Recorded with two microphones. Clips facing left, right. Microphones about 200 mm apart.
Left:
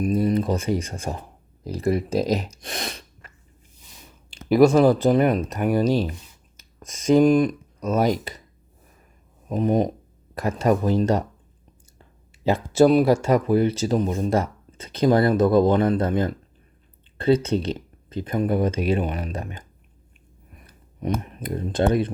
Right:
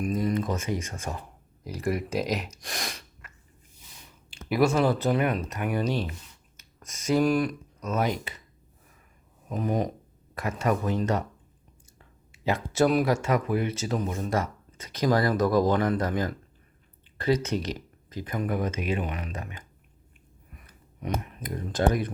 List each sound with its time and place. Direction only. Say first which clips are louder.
0.0 s speech: left 6 dB; 35° left (ahead or behind)
2.6 s sneeze: left 4 dB; 25° left (ahead or behind)
4.4 s speech: left 8 dB; 35° left (ahead or behind)
7.3 s speech: left 7 dB; 20° left (ahead or behind)
7.8 s speech: left 6 dB; 35° left (ahead or behind)
9.5 s speech: left 7 dB; 30° left (ahead or behind)
12.5 s speech: left 7 dB; 30° left (ahead or behind)
20.7 s speech: left 6 dB; 35° left (ahead or behind)